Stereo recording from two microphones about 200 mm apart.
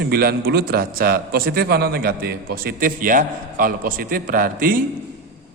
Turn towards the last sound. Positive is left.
turn(degrees=-45)  # may be behind; listen again after turning